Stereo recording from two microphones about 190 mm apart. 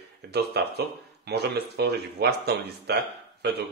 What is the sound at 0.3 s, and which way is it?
Speech, 60° right (ahead or behind).